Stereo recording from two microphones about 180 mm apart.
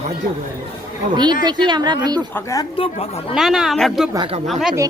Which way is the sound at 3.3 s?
Centre (ahead or behind).